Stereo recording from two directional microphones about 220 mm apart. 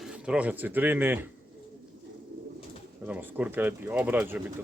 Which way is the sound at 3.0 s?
10° right (ahead or behind).